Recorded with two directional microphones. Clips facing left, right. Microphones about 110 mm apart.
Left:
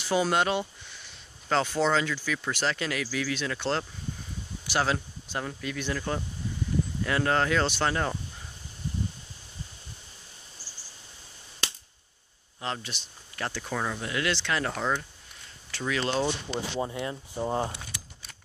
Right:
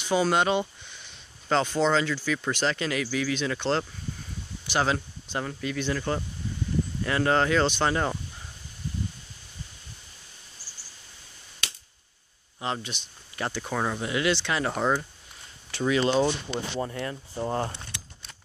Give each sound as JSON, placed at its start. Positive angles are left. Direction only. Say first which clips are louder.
{"t": 0.0, "sound": "speech", "louder": "right 2 dB", "side_deg": 5}
{"t": 2.1, "sound": "speech", "louder": "right 3 dB", "side_deg": -10}
{"t": 2.5, "sound": "speech", "louder": "right 1 dB", "side_deg": 0}
{"t": 4.6, "sound": "speech", "louder": "right 2 dB", "side_deg": 5}
{"t": 12.5, "sound": "speech", "louder": "right 3 dB", "side_deg": -10}
{"t": 14.7, "sound": "speech", "louder": "right 4 dB", "side_deg": -20}
{"t": 16.8, "sound": "speech", "louder": "even", "side_deg": 15}